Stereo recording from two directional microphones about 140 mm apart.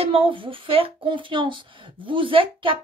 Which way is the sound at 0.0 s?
40° right (ahead or behind).